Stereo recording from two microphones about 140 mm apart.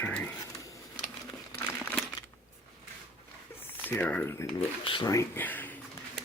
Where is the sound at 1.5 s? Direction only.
10° left (ahead or behind).